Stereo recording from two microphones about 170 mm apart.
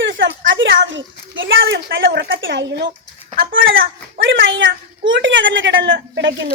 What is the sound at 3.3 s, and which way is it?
A child's voice, 75° right (ahead or behind).